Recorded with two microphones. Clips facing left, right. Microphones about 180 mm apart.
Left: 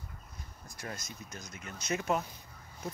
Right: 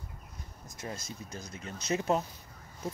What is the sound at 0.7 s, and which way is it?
Speech, 20° right (ahead or behind).